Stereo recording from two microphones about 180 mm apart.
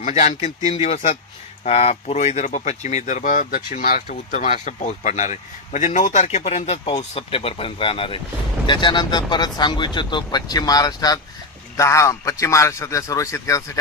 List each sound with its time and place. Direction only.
0.0 s a man's voice: 40° left (ahead or behind); by 13.7 s 15° left (ahead or behind)